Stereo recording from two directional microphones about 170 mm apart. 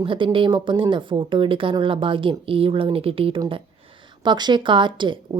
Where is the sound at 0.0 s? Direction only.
30° right (ahead or behind).